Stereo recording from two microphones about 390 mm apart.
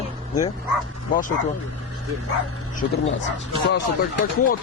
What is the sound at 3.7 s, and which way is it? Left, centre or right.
Speech, left.